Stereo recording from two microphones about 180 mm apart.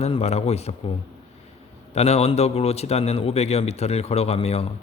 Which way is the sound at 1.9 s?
35° left (ahead or behind).